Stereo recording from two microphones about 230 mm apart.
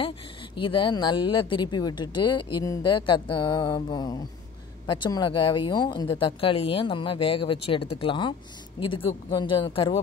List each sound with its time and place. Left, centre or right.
0.6 s speech: left